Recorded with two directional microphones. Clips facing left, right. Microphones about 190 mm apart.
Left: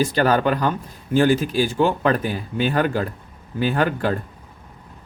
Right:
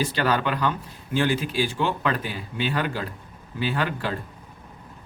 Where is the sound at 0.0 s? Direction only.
45° left (ahead or behind).